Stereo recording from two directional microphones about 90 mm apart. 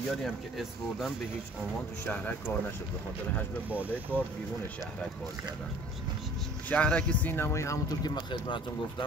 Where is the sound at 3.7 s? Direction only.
20° right (ahead or behind).